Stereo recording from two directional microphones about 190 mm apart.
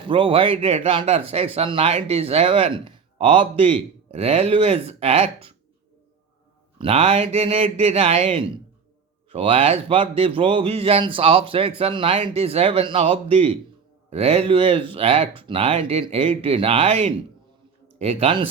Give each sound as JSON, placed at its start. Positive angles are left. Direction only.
{"t": 0.1, "sound": "speech", "side_deg": -25}
{"t": 6.7, "sound": "speech", "side_deg": -30}